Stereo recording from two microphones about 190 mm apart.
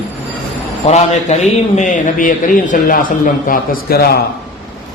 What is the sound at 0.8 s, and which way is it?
A man's voice, 35° left (ahead or behind).